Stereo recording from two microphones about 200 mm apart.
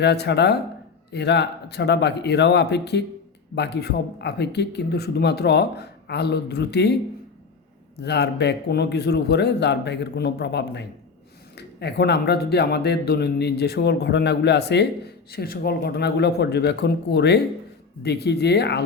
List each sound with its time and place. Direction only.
0.0 s speech: 55° left (ahead or behind)
8.0 s speech: 55° left (ahead or behind)